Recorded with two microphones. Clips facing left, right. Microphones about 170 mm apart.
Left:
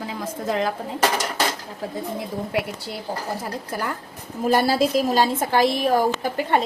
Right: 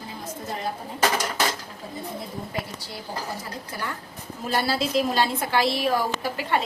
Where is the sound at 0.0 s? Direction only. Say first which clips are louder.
Left 7 dB; 90° left.